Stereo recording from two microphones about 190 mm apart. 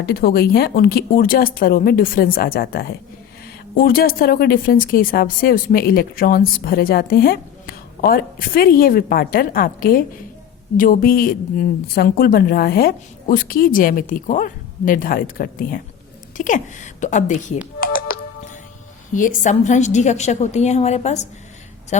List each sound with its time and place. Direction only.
0.0 s a woman's voice: 55° left (ahead or behind)
17.7 s music: 50° left (ahead or behind)
19.1 s a woman's voice: 40° left (ahead or behind)